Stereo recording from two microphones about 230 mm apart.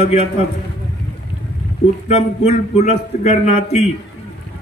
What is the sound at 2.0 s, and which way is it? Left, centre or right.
A man's voice, left.